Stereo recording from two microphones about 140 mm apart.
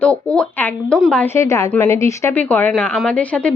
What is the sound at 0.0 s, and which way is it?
Speech, 10° left (ahead or behind).